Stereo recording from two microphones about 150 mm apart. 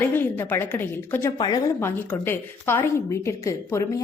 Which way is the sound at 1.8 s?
15° left (ahead or behind).